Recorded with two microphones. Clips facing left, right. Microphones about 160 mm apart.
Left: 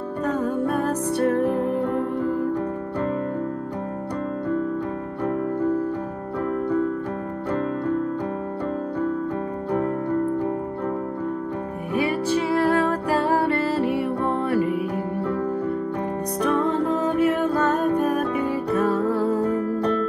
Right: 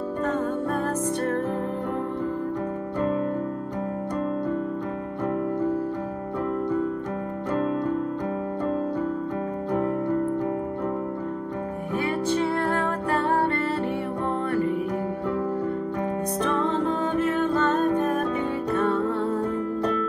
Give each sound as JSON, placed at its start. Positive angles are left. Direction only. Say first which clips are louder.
{"t": 0.2, "sound": "music", "louder": "left 3 dB", "side_deg": 10}
{"t": 12.4, "sound": "music", "louder": "left 5 dB", "side_deg": 80}
{"t": 16.4, "sound": "music", "louder": "left 4 dB", "side_deg": 5}